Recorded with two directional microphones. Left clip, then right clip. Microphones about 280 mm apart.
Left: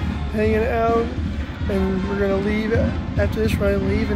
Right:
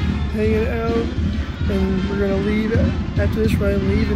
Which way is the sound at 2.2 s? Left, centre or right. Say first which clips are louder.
Even; centre.